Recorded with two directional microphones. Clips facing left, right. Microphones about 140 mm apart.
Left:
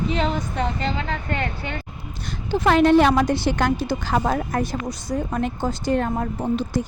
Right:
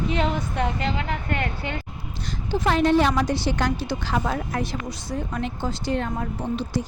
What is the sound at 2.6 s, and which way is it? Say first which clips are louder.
Speech: left 4 dB; 65° left (ahead or behind).